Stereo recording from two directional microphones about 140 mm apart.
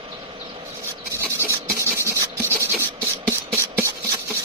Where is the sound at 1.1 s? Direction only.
15° right (ahead or behind).